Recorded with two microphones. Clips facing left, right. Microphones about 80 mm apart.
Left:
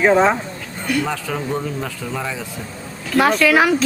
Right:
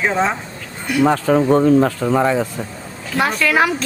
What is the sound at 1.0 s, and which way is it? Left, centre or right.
Speech, right.